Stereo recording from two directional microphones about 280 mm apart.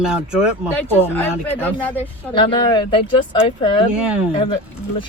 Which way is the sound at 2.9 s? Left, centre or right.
Centre.